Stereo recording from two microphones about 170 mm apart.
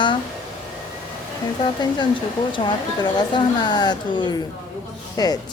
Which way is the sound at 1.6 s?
25° left (ahead or behind).